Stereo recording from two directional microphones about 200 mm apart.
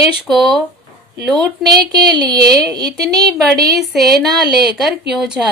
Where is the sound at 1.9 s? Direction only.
20° right (ahead or behind).